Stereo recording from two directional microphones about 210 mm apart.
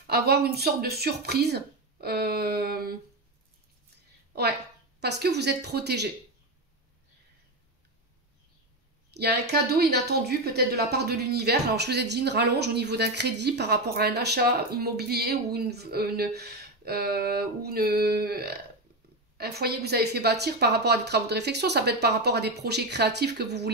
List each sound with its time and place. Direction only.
0.0 s speech: 50° right (ahead or behind)
5.0 s speech: 50° right (ahead or behind)
9.1 s speech: 50° right (ahead or behind)